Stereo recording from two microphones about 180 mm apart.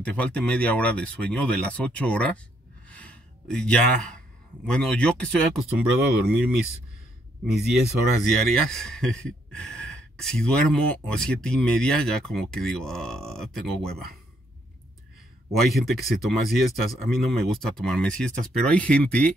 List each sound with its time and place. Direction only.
0.0 s speech: 5° left (ahead or behind)
2.9 s gasp: 5° left (ahead or behind)
4.6 s speech: 5° left (ahead or behind)
7.7 s speech: centre (ahead or behind)
15.7 s speech: centre (ahead or behind)